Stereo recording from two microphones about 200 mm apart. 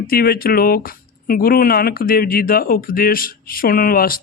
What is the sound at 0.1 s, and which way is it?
Speech, 50° left (ahead or behind).